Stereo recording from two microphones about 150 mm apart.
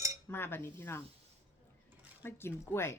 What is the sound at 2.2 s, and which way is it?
Speech, 15° left (ahead or behind).